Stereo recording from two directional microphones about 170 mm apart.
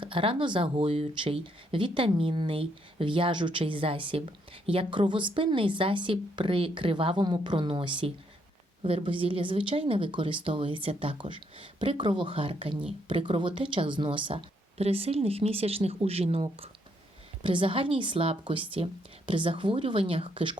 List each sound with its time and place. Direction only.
0.0 s a woman's voice: 30° right (ahead or behind)